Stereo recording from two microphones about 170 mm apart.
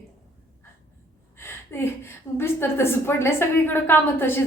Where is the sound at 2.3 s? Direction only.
15° left (ahead or behind).